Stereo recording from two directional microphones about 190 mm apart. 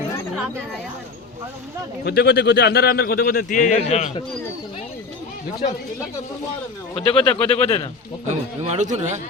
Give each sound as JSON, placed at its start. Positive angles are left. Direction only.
{"t": 2.0, "sound": "speech", "side_deg": 60}
{"t": 7.1, "sound": "speech", "side_deg": 30}
{"t": 8.3, "sound": "a man's voice", "side_deg": -35}